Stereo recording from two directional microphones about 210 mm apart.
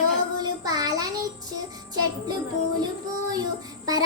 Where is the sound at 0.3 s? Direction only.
15° right (ahead or behind).